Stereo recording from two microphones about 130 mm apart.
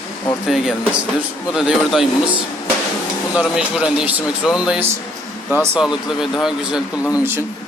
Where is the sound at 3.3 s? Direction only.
5° right (ahead or behind).